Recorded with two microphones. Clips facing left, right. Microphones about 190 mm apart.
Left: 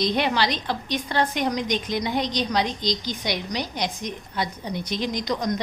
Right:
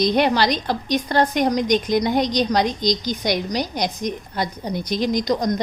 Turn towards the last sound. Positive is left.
turn(degrees=-40)  # may be behind; listen again after turning